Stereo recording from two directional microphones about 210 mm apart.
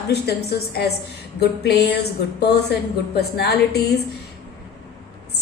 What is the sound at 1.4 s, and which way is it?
A woman's voice, 50° left (ahead or behind).